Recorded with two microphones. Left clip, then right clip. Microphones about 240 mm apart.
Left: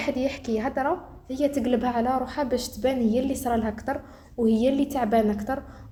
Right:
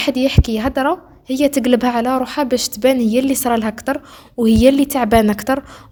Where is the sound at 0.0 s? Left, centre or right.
Right.